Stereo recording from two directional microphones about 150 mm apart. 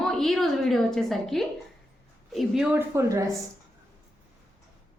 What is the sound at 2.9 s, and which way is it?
Speech, 20° right (ahead or behind).